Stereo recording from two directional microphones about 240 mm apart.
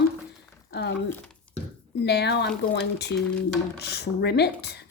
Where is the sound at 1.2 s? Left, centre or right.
Centre.